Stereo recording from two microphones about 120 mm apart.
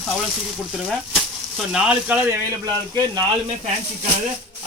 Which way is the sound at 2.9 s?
35° right (ahead or behind).